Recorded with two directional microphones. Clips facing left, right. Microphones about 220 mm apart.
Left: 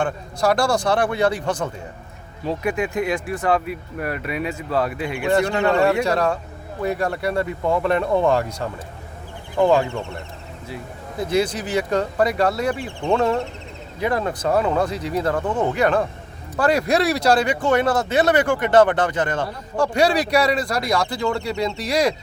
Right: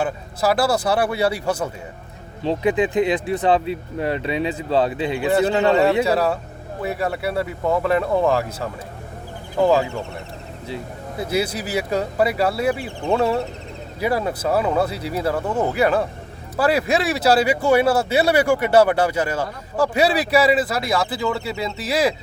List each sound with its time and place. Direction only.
0.0 s speech: 5° right (ahead or behind)
2.4 s speech: 25° right (ahead or behind)
6.1 s speech: 5° right (ahead or behind)
11.2 s speech: 10° right (ahead or behind)